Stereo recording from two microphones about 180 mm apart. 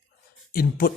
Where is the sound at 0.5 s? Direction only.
55° left (ahead or behind).